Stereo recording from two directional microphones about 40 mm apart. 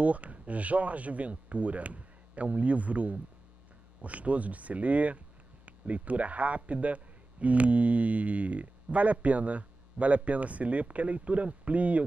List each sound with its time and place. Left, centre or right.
0.0 s speech: right